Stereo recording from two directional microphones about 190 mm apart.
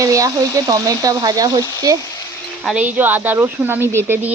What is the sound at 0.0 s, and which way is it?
Speech, 15° right (ahead or behind).